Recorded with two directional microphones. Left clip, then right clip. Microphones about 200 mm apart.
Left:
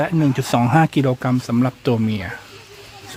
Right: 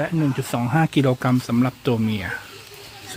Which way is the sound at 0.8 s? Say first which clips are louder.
Left 2 dB; 10° left (ahead or behind).